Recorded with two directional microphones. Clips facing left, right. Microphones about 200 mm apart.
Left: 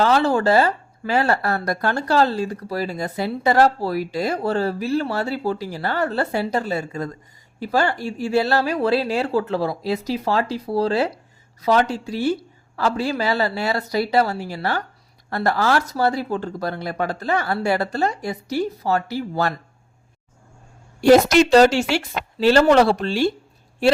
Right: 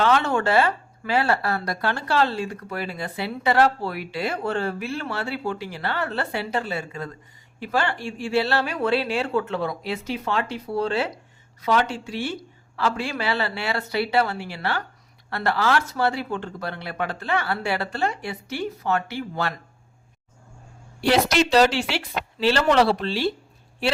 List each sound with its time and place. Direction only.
0.0 s speech: 35° left (ahead or behind)
21.0 s speech: 45° left (ahead or behind)